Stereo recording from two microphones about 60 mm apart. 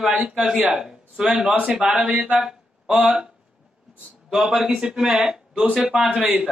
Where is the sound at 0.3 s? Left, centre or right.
Centre.